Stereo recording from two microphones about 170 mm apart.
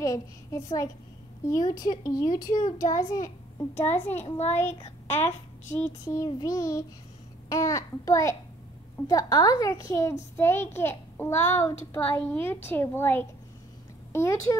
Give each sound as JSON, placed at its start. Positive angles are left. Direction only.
{"t": 0.0, "sound": "a woman's voice", "side_deg": 20}
{"t": 4.2, "sound": "a child's voice", "side_deg": 40}
{"t": 4.6, "sound": "a child's voice", "side_deg": 15}